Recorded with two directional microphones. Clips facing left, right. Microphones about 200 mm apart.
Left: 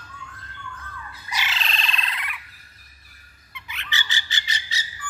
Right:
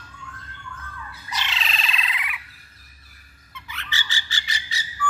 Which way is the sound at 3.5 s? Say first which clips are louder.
Left 1 dB; 20° left (ahead or behind).